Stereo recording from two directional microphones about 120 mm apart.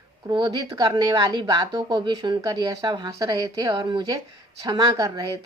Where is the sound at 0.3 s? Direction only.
35° right (ahead or behind).